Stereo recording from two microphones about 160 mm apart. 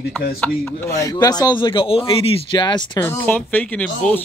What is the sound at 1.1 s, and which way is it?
A man's voice, 25° left (ahead or behind).